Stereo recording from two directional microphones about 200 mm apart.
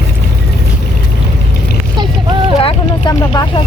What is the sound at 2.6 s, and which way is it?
Vehicle, 20° left (ahead or behind).